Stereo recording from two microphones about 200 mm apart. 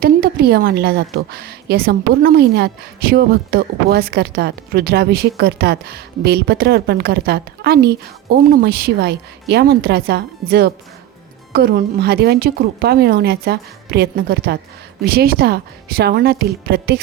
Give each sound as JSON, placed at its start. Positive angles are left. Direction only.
{"t": 0.0, "sound": "a woman's voice", "side_deg": -50}